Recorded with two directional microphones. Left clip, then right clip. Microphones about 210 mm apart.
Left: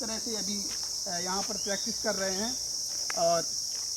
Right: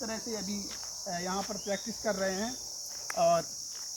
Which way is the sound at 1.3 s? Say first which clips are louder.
Left 2 dB; 15° right (ahead or behind).